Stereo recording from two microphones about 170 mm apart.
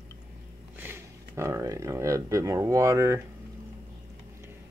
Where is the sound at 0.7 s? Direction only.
15° right (ahead or behind).